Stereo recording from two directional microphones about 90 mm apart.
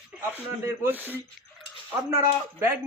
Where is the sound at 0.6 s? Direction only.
30° right (ahead or behind).